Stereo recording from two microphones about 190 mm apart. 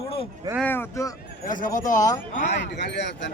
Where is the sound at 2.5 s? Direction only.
65° left (ahead or behind).